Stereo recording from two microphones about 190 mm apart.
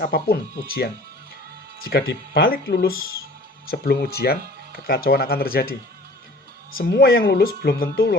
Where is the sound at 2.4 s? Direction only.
50° left (ahead or behind).